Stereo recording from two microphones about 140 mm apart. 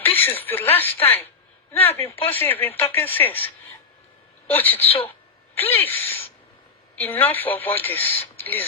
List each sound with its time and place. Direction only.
0.1 s speech: 15° left (ahead or behind)
4.8 s a woman's voice: 45° left (ahead or behind)
5.7 s speech: 15° left (ahead or behind)